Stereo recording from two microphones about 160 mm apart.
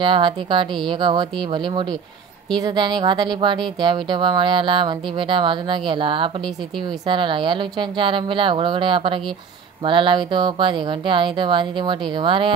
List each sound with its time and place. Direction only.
0.0 s speech: 30° right (ahead or behind)